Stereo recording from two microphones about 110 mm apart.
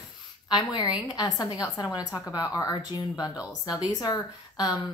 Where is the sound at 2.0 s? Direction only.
5° right (ahead or behind).